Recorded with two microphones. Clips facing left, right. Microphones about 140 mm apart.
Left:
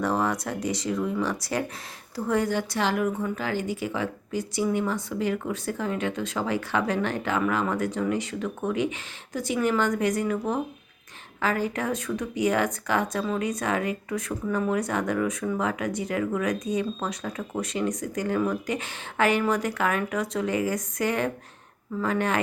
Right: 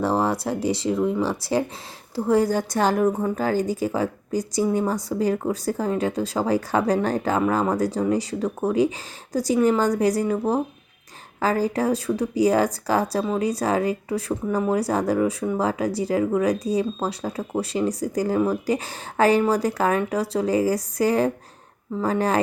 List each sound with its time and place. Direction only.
0.0 s a woman's voice: 30° right (ahead or behind)